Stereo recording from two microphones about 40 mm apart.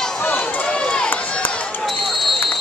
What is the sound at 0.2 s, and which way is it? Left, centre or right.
Run, left.